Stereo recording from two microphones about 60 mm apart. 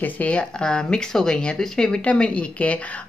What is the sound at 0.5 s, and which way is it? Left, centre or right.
Speech, centre.